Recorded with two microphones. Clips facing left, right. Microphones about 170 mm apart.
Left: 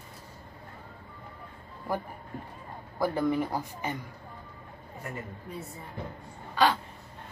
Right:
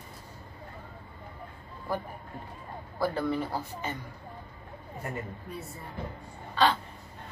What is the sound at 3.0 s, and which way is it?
A man's voice, 15° left (ahead or behind).